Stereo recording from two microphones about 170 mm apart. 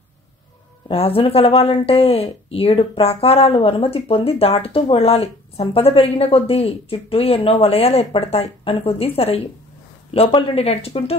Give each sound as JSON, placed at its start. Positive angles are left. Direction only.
{"t": 0.8, "sound": "speech", "side_deg": 35}